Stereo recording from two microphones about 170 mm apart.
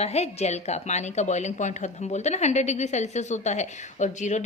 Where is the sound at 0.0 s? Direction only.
40° left (ahead or behind).